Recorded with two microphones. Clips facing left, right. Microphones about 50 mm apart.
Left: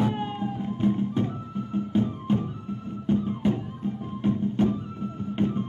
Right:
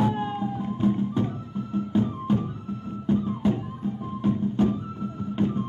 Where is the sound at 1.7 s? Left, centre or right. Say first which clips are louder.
Right 1 dB; left.